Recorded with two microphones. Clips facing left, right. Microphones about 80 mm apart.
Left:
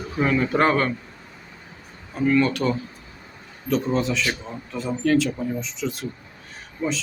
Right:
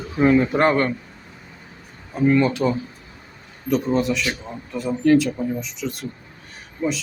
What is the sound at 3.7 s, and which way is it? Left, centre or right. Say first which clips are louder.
A man's voice: right 2 dB; centre.